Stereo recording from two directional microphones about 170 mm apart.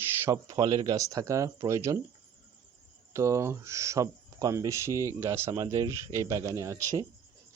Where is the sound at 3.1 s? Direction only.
15° right (ahead or behind).